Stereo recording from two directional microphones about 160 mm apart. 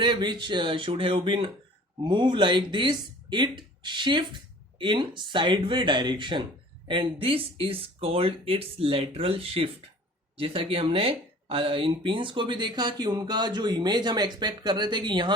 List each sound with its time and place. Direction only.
0.0 s speech: 30° right (ahead or behind)